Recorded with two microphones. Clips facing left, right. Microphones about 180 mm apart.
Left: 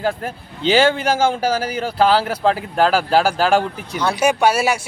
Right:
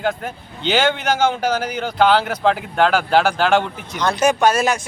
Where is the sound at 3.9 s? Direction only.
10° left (ahead or behind).